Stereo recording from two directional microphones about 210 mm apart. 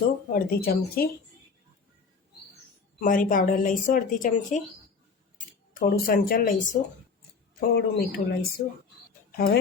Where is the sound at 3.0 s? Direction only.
40° left (ahead or behind).